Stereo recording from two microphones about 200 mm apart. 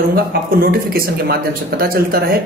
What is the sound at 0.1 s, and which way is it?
Speech, 50° right (ahead or behind).